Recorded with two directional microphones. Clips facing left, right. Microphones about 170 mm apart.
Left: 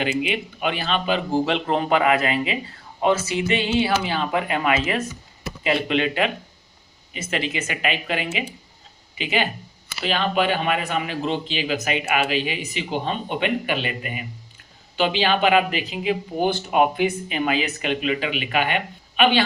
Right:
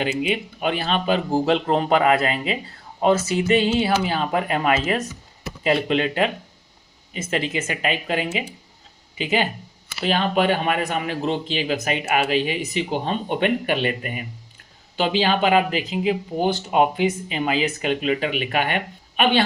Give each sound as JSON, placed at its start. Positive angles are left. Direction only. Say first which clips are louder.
{"t": 0.0, "sound": "speech", "louder": "right 1 dB", "side_deg": -35}
{"t": 14.9, "sound": "speech", "louder": "even", "side_deg": -35}